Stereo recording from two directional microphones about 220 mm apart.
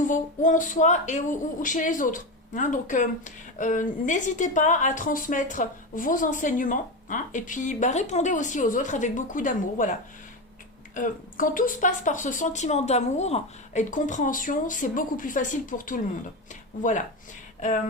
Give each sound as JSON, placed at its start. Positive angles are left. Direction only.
{"t": 0.0, "sound": "speech", "side_deg": 35}